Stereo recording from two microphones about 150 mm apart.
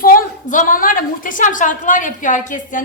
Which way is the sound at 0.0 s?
65° left (ahead or behind).